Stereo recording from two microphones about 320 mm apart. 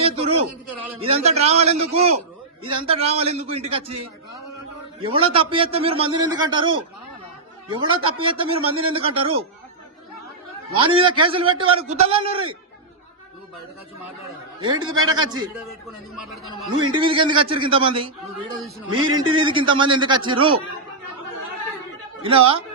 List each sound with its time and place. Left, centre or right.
0.0 s a sound: centre
1.0 s a man's voice: centre
4.9 s a man's voice: centre
10.8 s a man's voice: centre
15.0 s a man's voice: centre
16.1 s speech: centre
16.5 s a man's voice: centre
22.2 s a man's voice: centre